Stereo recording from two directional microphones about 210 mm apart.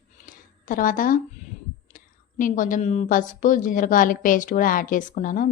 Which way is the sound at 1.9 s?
40° left (ahead or behind).